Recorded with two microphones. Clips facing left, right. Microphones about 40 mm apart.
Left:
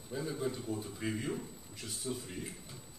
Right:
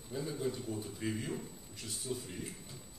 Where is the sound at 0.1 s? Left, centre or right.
Centre.